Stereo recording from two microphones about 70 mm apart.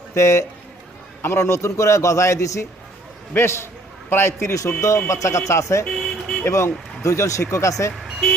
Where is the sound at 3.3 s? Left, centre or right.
Left.